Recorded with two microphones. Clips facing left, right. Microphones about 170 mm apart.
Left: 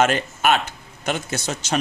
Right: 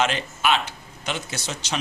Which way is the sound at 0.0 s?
50° left (ahead or behind).